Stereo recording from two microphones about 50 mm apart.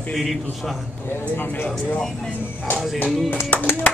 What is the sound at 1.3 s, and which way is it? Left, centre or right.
Speech, left.